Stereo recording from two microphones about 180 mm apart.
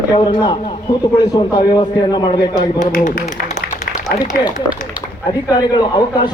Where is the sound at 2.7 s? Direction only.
40° left (ahead or behind).